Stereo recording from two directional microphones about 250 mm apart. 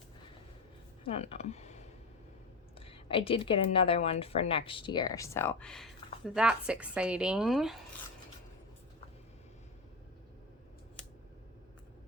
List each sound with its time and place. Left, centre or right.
1.0 s speech: left; by 7.8 s centre